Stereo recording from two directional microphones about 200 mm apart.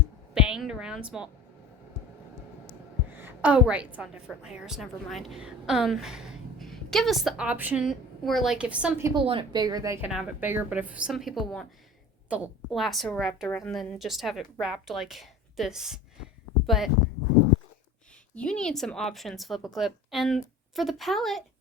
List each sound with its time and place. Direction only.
0.3 s a woman's voice: 5° right (ahead or behind)
3.2 s a woman's voice: 10° right (ahead or behind)
9.1 s a woman's voice: 25° right (ahead or behind); by 16.9 s centre (ahead or behind)
18.3 s a woman's voice: 5° left (ahead or behind)